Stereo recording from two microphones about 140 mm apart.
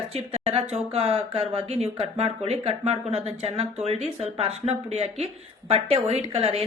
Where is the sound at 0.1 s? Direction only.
45° right (ahead or behind).